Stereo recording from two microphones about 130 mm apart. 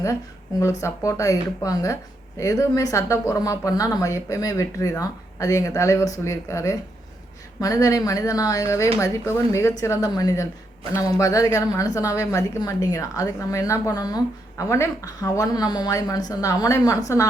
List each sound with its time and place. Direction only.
0.6 s speech: 25° left (ahead or behind)